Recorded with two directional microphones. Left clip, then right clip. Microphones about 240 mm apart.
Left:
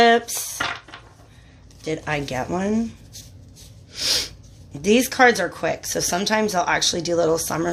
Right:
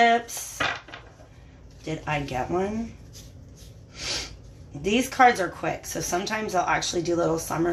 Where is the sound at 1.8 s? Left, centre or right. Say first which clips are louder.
Left 4 dB; left.